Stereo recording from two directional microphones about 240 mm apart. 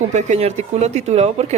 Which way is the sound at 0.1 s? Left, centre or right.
Right.